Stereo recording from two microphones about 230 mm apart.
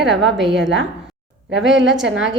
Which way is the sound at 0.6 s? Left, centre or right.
Right.